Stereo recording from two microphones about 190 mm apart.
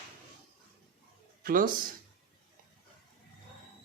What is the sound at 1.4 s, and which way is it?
Speech, 50° right (ahead or behind).